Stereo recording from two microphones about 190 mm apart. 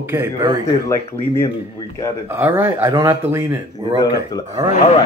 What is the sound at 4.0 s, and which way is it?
Speech, 20° left (ahead or behind).